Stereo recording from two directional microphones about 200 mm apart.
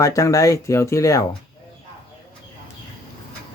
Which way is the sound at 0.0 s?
15° left (ahead or behind).